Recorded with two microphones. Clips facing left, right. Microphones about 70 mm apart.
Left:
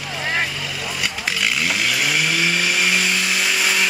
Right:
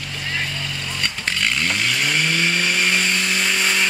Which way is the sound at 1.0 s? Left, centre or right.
Centre.